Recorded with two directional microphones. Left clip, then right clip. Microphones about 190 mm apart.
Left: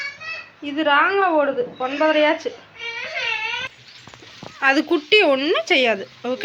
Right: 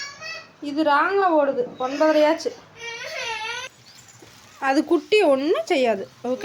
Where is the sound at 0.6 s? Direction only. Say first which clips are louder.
Left 2 dB; 15° right (ahead or behind).